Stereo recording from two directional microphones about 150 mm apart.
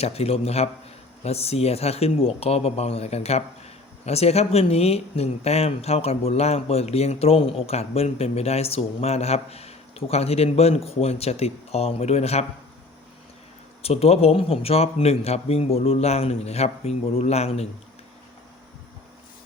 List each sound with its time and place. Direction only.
0.0 s speech: 40° left (ahead or behind)
13.8 s speech: 45° left (ahead or behind)